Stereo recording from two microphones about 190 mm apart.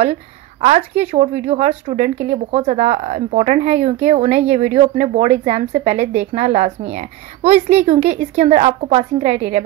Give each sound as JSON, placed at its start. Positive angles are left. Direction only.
{"t": 0.0, "sound": "speech", "side_deg": -35}